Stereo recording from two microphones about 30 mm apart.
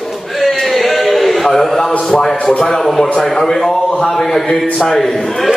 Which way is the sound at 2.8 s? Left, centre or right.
Centre.